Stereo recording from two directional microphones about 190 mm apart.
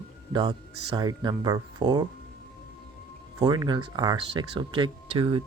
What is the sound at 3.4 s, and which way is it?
Speech, 20° right (ahead or behind).